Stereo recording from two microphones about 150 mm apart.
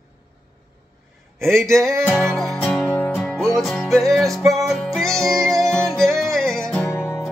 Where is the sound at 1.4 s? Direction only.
20° right (ahead or behind).